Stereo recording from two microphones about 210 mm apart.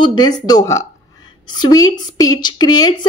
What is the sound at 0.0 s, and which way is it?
A woman's voice, 20° left (ahead or behind).